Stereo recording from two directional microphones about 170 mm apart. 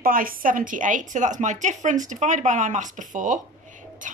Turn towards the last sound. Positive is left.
turn(degrees=-50)  # may be behind; listen again after turning